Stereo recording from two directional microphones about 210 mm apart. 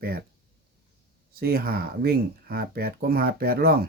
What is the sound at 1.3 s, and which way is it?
Speech, 45° right (ahead or behind).